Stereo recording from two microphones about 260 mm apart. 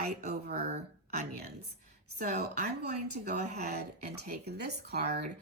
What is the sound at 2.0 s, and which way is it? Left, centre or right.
Speech, right.